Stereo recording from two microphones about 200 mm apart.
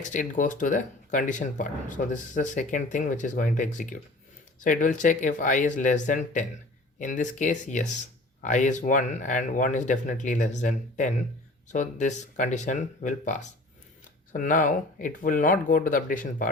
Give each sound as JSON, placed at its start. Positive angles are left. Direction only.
{"t": 0.0, "sound": "speech", "side_deg": 40}